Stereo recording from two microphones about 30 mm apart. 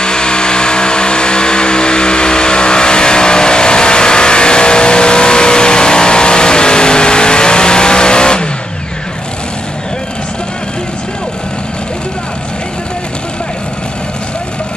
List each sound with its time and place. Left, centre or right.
0.0 s vehicle: left